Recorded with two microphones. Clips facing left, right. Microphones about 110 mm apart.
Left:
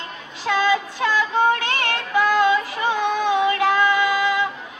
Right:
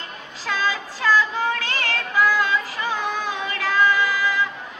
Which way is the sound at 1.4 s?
20° left (ahead or behind).